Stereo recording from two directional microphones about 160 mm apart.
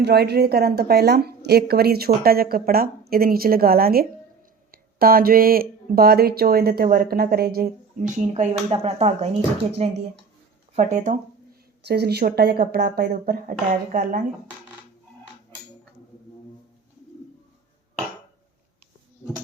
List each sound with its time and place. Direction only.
0.0 s a woman's voice: 90° right; by 7.7 s 75° right (ahead or behind)
7.9 s speech: 50° right (ahead or behind)
11.9 s a woman's voice: 90° right; by 14.2 s 60° right (ahead or behind)